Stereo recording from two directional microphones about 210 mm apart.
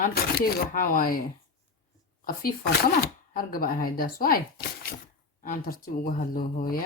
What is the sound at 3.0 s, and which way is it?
Speech, 45° left (ahead or behind).